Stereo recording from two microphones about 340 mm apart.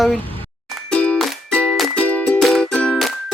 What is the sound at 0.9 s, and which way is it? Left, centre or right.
Music, centre.